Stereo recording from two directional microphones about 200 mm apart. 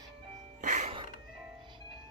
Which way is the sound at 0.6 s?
35° right (ahead or behind).